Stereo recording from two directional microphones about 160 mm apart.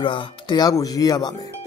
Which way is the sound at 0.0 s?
30° left (ahead or behind).